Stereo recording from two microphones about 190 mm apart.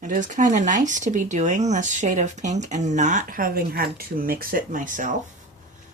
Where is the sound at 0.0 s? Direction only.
40° right (ahead or behind).